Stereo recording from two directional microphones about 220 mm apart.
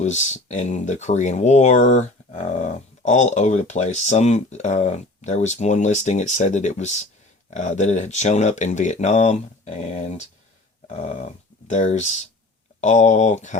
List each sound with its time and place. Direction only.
0.0 s speech: 30° left (ahead or behind)
10.8 s a sound: 30° left (ahead or behind)
11.7 s speech: 35° left (ahead or behind)